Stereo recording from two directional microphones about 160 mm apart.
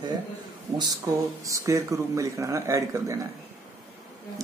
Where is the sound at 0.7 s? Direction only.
20° right (ahead or behind).